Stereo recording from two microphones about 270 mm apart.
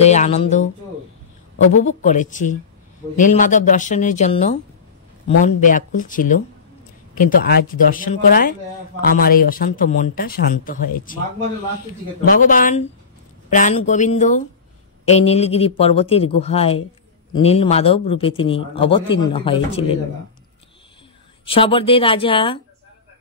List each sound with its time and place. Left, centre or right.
0.0 s speech: left
1.7 s speech: left
12.3 s speech: left
21.5 s speech: centre